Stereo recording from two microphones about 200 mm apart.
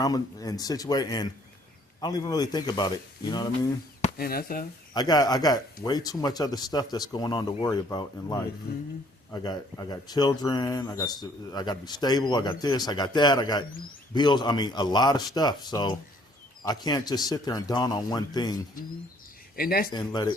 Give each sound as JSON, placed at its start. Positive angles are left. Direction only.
{"t": 0.0, "sound": "speech", "side_deg": 20}
{"t": 4.2, "sound": "speech", "side_deg": 50}
{"t": 4.9, "sound": "speech", "side_deg": 20}
{"t": 19.5, "sound": "speech", "side_deg": 45}
{"t": 19.9, "sound": "speech", "side_deg": 20}